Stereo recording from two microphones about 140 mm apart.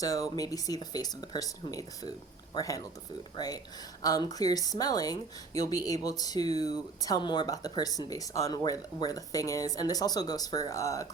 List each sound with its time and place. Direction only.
0.0 s a woman's voice: 25° left (ahead or behind)